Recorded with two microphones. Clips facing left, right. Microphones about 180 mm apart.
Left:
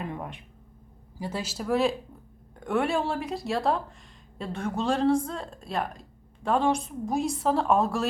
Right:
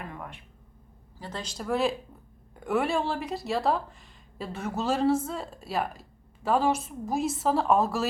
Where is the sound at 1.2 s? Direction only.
10° left (ahead or behind).